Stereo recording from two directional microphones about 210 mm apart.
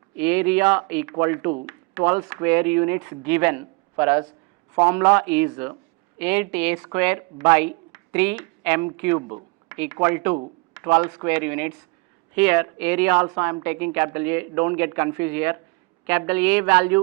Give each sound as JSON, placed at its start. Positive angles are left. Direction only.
{"t": 0.2, "sound": "speech", "side_deg": -10}